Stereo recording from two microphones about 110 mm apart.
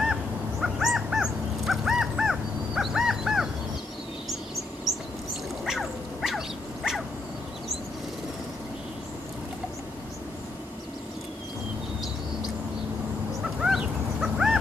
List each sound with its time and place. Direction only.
0.0 s crow: 5° right (ahead or behind)
5.7 s dog: 5° right (ahead or behind)
13.6 s dog: 5° right (ahead or behind)